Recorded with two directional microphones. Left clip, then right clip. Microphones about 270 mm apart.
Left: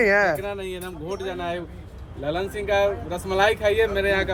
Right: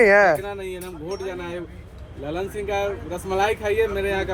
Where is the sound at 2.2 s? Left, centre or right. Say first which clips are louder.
Left 1 dB; centre.